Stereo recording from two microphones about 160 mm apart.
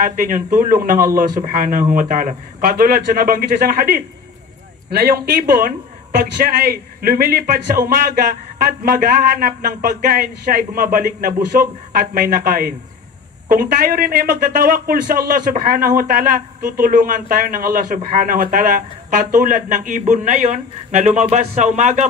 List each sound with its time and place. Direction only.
0.0 s a man's voice: 60° right (ahead or behind)